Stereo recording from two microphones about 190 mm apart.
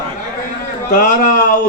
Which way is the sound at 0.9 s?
45° left (ahead or behind).